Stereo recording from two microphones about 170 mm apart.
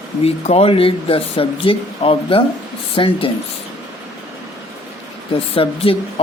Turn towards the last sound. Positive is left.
turn(degrees=35)  # may be behind; listen again after turning